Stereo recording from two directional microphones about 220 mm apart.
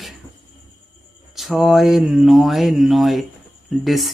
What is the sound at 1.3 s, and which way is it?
Speech, centre (ahead or behind).